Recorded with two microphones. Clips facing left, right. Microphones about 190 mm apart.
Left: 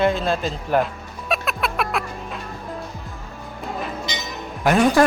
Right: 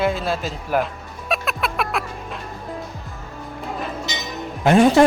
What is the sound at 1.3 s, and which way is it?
Music, centre (ahead or behind).